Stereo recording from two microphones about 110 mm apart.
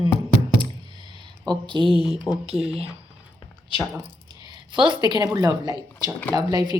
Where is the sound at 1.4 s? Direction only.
45° right (ahead or behind).